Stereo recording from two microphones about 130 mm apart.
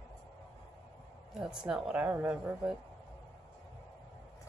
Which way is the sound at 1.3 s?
5° right (ahead or behind).